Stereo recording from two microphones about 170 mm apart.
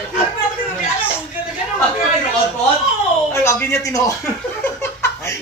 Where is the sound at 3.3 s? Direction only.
15° left (ahead or behind).